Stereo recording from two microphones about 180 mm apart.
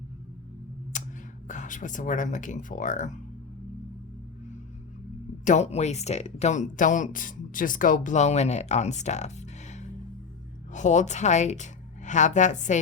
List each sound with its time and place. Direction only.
0.9 s a sound: 45° left (ahead or behind)
1.5 s speech: 45° left (ahead or behind)
5.5 s speech: 40° left (ahead or behind)